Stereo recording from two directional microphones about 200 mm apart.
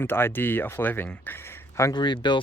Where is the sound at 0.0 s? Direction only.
10° left (ahead or behind).